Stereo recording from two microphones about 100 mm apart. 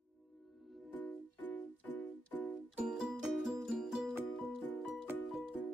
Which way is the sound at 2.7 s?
5° right (ahead or behind).